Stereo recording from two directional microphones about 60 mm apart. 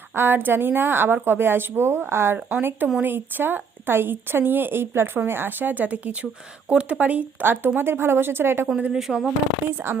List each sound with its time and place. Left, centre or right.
0.1 s a woman's voice: right
8.9 s speech: centre
9.9 s speech: right